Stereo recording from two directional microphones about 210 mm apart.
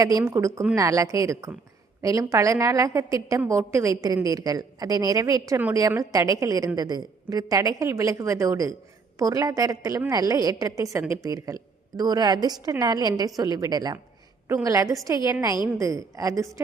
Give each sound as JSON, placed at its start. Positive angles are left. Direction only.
{"t": 0.0, "sound": "a woman's voice", "side_deg": -15}